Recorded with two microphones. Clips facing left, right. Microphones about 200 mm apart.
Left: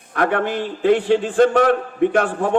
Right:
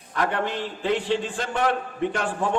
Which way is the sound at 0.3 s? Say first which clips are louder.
Left 6 dB; 60° left (ahead or behind).